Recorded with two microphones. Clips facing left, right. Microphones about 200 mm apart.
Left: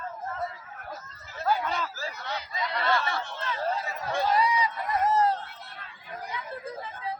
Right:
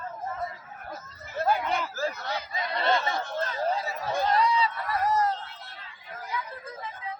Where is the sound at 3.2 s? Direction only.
40° right (ahead or behind).